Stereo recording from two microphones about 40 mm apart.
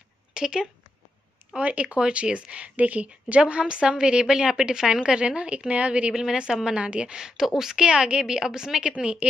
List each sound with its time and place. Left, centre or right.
0.3 s speech: centre
1.6 s a woman's voice: right
2.7 s a woman's voice: right
6.1 s a woman's voice: centre
7.8 s a woman's voice: right
8.9 s a woman's voice: right